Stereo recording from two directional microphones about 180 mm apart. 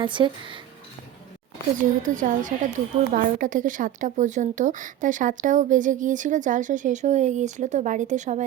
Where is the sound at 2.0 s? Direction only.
45° right (ahead or behind).